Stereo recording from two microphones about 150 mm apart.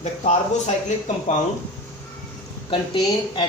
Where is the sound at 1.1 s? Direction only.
55° left (ahead or behind).